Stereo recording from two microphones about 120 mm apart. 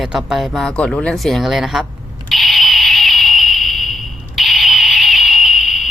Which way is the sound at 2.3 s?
Centre (ahead or behind).